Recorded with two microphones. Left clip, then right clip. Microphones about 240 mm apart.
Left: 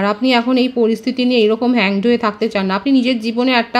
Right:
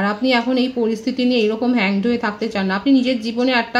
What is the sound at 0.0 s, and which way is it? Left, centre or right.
Speech, left.